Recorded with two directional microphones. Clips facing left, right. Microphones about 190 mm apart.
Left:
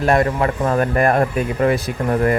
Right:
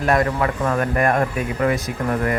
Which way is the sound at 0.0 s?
25° left (ahead or behind).